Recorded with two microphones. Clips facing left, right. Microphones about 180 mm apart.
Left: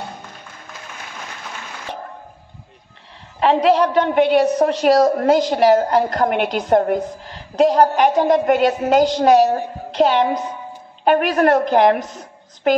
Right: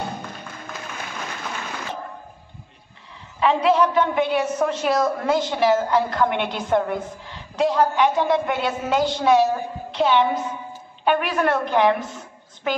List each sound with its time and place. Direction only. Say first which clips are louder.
3.4 s a woman's voice: left 3 dB; 35° left (ahead or behind)